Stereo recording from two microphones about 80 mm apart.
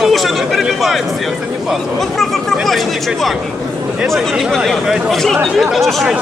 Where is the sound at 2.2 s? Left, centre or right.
Centre.